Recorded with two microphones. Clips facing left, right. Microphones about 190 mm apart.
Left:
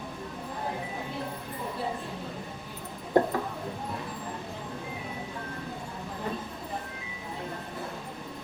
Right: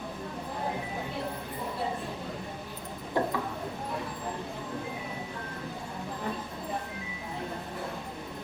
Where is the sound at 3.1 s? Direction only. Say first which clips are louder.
Left 6 dB; 45° left (ahead or behind).